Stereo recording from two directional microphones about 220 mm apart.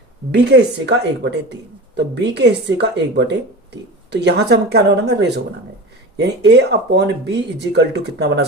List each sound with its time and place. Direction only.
0.3 s speech: 50° right (ahead or behind)